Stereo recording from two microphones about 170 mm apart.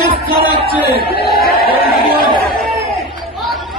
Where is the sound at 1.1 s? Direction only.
65° left (ahead or behind).